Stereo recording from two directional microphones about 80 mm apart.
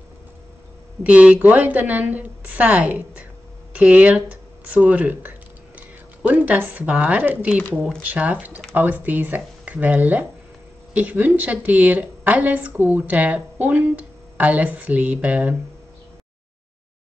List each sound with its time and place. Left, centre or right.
1.0 s a woman's voice: centre